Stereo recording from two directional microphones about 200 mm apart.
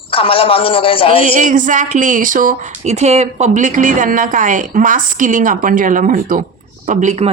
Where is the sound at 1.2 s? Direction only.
40° right (ahead or behind).